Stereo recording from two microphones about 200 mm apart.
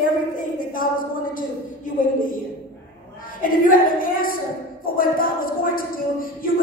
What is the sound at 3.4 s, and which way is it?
Speech, 45° left (ahead or behind).